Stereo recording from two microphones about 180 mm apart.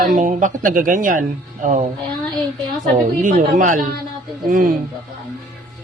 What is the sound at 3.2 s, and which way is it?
A man's voice, 45° right (ahead or behind).